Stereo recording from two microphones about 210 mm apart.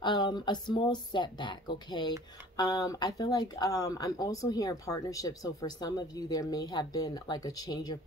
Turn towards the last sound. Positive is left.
turn(degrees=20)  # may be behind; listen again after turning